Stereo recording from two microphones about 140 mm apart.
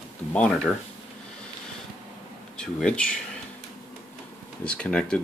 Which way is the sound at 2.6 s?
5° left (ahead or behind).